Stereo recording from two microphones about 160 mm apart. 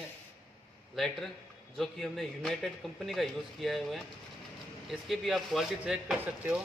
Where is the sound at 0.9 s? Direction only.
Centre (ahead or behind).